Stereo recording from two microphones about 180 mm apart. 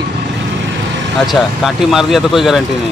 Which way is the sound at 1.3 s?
Centre (ahead or behind).